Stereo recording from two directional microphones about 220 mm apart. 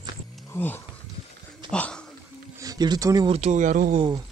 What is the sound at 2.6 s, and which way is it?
Speech, 15° right (ahead or behind).